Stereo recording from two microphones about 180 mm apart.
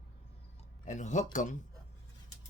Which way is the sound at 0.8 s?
45° left (ahead or behind).